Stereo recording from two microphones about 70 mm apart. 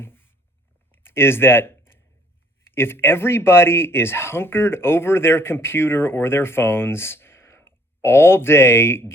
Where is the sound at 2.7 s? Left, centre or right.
Left.